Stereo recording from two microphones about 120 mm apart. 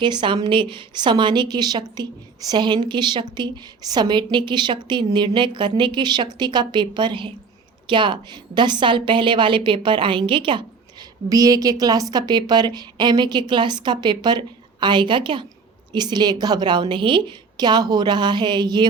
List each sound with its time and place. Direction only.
0.0 s a woman's voice: 40° right (ahead or behind)
11.3 s a woman's voice: 30° right (ahead or behind)